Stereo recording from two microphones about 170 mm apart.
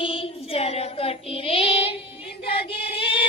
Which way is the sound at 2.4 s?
30° left (ahead or behind).